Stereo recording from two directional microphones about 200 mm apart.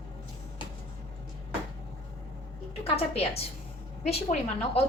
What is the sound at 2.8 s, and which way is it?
A woman's voice, 30° left (ahead or behind).